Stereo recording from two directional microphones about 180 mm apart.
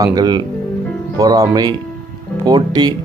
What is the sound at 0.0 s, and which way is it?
Speech, 20° right (ahead or behind).